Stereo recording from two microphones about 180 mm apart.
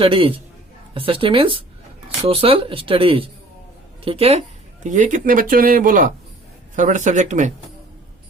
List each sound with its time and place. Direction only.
0.0 s speech: 30° right (ahead or behind)